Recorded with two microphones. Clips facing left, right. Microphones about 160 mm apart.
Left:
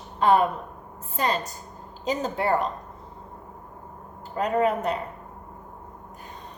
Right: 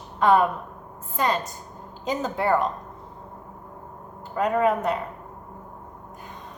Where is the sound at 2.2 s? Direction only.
30° left (ahead or behind).